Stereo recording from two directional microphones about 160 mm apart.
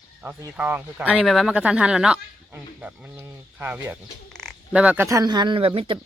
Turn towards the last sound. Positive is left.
turn(degrees=-35)  # may be behind; listen again after turning